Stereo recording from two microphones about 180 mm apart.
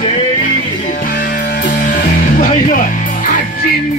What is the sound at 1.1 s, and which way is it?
Music, 65° left (ahead or behind).